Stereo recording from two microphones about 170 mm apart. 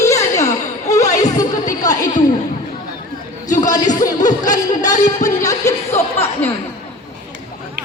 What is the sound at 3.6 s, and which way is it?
Music, 20° left (ahead or behind).